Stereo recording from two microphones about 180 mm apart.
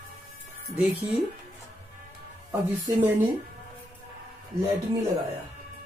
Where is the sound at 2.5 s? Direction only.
20° right (ahead or behind).